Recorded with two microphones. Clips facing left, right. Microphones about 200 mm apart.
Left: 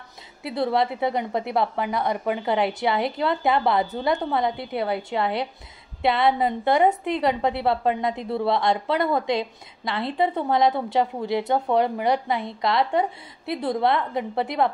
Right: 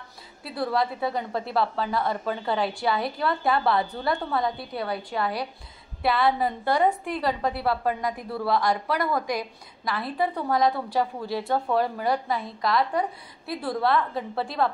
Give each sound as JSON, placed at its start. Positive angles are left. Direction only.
{"t": 0.4, "sound": "a woman's voice", "side_deg": 20}